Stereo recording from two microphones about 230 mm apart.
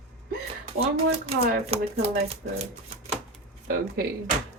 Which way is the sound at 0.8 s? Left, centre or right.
Right.